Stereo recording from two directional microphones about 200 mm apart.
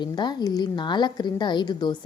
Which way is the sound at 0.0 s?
20° left (ahead or behind).